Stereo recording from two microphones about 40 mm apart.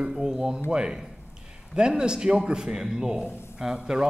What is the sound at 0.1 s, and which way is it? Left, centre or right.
A man's voice, centre.